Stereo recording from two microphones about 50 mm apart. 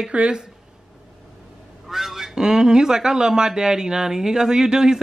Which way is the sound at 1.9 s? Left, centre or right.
Centre.